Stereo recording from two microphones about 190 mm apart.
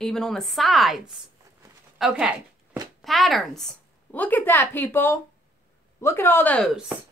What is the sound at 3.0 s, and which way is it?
A woman's voice, centre (ahead or behind).